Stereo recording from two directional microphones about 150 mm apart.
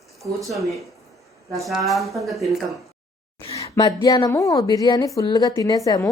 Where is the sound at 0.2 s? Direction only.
Centre (ahead or behind).